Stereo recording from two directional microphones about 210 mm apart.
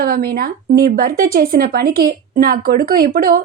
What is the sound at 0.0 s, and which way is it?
A woman's voice, 45° right (ahead or behind).